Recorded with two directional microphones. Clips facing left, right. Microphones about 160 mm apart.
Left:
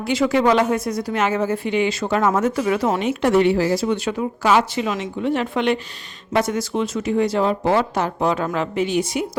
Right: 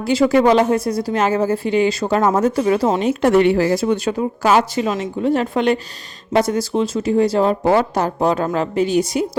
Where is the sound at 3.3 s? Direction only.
55° right (ahead or behind).